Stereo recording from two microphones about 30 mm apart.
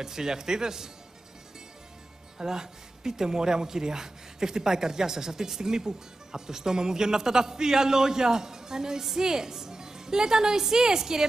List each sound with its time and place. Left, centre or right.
0.0 s speech: centre
2.3 s speech: right